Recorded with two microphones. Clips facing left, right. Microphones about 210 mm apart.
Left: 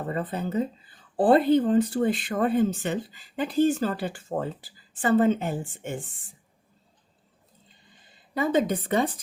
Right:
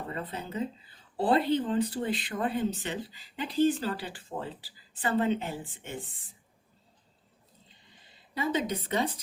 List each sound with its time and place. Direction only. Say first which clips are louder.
0.1 s speech: left 11 dB; 50° left (ahead or behind)
8.4 s speech: left 6 dB; 50° left (ahead or behind)